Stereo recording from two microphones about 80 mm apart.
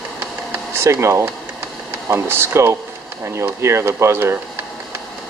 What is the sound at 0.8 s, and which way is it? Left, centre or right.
Speech, right.